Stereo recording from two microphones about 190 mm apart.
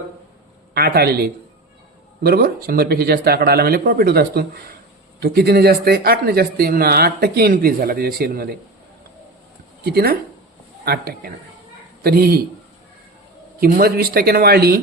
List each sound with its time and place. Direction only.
0.7 s speech: 55° right (ahead or behind)
9.8 s speech: 55° right (ahead or behind)
13.6 s speech: 50° right (ahead or behind)